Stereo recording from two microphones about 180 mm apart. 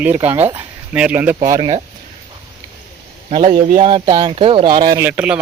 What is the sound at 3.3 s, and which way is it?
Speech, 35° right (ahead or behind).